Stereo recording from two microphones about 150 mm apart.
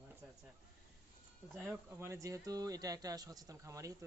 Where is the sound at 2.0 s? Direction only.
20° right (ahead or behind).